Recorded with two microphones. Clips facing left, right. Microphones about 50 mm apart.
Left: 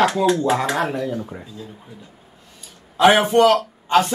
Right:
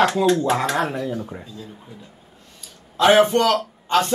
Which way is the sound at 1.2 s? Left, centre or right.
Centre.